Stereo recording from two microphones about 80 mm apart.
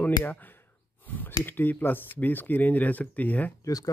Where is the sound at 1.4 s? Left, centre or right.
Left.